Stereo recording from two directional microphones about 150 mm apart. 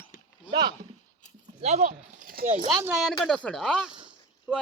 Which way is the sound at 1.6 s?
55° right (ahead or behind).